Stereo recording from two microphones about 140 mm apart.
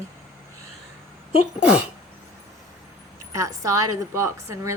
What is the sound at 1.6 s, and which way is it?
Speech, 10° right (ahead or behind).